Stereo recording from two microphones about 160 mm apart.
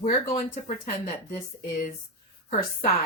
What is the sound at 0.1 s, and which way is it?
Speech, 60° left (ahead or behind).